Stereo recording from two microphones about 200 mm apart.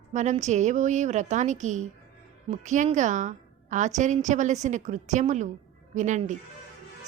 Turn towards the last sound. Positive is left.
turn(degrees=-40)  # may be behind; listen again after turning